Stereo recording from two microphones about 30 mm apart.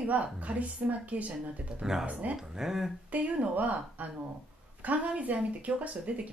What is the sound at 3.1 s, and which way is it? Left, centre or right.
A woman's voice, right.